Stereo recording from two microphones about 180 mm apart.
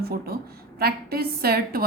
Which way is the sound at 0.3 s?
60° right (ahead or behind).